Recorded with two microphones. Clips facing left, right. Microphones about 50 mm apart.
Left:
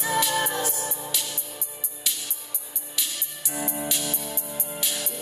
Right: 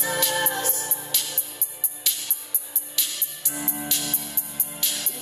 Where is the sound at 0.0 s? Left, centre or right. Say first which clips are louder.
Left 1 dB; centre.